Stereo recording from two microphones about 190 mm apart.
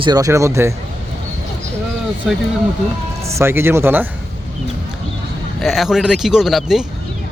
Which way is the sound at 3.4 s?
10° right (ahead or behind).